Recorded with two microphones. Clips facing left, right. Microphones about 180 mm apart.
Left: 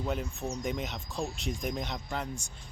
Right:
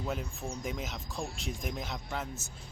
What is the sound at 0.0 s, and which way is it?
Speech, centre (ahead or behind).